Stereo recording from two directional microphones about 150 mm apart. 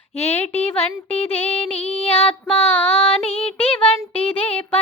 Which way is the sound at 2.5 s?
10° left (ahead or behind).